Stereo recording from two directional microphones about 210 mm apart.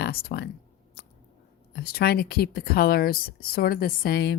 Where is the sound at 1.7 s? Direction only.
50° left (ahead or behind).